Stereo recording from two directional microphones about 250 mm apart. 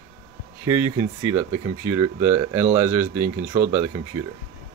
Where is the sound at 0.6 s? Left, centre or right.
Centre.